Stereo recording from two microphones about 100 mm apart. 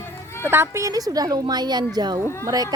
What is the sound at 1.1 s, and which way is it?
A woman's voice, 40° right (ahead or behind).